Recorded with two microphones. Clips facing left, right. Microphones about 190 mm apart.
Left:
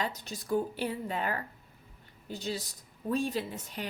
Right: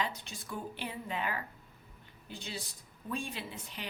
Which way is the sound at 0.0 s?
40° left (ahead or behind).